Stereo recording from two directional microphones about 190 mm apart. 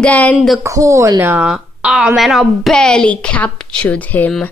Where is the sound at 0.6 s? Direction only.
15° right (ahead or behind).